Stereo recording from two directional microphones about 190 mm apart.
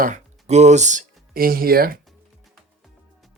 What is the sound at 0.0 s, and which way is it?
Speech, 40° right (ahead or behind).